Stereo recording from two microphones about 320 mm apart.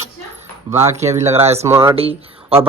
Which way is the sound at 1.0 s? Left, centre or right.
Centre.